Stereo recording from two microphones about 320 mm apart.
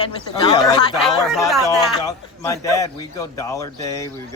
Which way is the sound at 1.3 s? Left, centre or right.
Centre.